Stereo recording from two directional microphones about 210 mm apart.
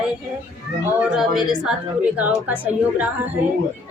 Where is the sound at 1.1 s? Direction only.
Centre (ahead or behind).